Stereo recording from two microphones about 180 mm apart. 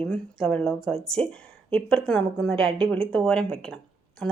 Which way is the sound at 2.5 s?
30° right (ahead or behind).